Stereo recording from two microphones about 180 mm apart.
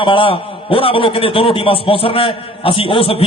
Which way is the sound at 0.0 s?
30° left (ahead or behind).